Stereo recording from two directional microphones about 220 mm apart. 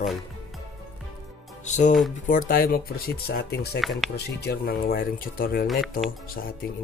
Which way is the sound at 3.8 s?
Centre (ahead or behind).